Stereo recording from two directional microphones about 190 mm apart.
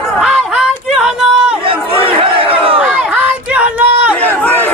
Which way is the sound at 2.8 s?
5° right (ahead or behind).